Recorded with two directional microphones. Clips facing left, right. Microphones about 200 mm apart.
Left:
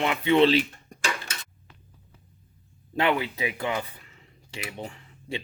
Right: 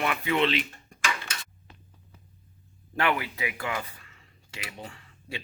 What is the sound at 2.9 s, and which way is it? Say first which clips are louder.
Speech: left 3 dB; 20° left (ahead or behind).